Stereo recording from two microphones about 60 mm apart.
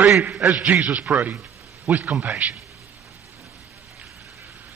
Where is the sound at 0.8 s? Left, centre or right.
Centre.